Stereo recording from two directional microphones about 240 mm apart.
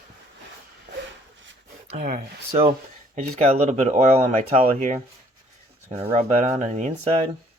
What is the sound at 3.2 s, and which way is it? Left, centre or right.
Speech, right.